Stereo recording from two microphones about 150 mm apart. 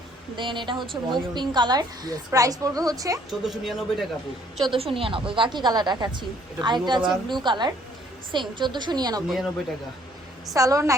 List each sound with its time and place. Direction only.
0.3 s a woman's voice: 30° right (ahead or behind)
3.2 s speech: centre (ahead or behind)
4.6 s speech: 35° right (ahead or behind)
9.2 s speech: centre (ahead or behind)
10.5 s a woman's voice: 20° right (ahead or behind)